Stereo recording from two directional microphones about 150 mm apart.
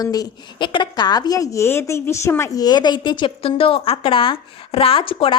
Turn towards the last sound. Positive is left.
turn(degrees=35)  # may be behind; listen again after turning